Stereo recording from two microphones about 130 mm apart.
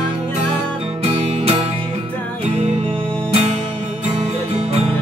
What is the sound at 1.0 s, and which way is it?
Music, 50° right (ahead or behind).